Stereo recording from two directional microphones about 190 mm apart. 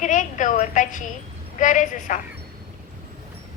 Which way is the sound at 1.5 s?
40° left (ahead or behind).